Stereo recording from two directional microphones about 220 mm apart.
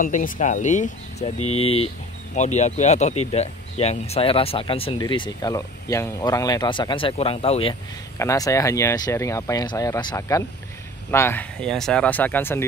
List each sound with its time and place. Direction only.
0.0 s speech: 35° left (ahead or behind)
8.2 s speech: 15° left (ahead or behind)